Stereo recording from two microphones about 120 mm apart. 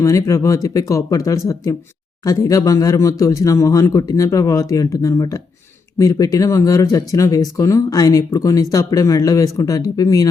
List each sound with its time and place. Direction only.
0.0 s speech: 25° left (ahead or behind)